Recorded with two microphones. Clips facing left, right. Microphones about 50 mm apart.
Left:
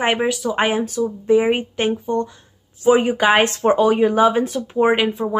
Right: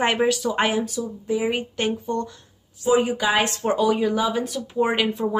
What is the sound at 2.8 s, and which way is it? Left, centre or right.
Speech, left.